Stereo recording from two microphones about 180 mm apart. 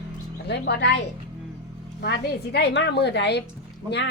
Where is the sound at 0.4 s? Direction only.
70° left (ahead or behind).